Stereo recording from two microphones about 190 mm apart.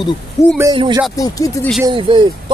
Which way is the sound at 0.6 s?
20° right (ahead or behind).